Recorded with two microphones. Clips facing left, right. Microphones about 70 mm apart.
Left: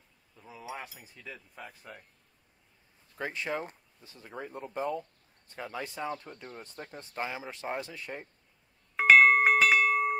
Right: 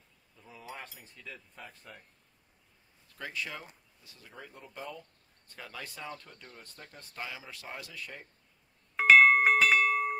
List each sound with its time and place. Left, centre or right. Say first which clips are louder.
0.4 s speech: left 4 dB; centre
3.2 s speech: left 6 dB; left
8.9 s bell: left 1 dB; centre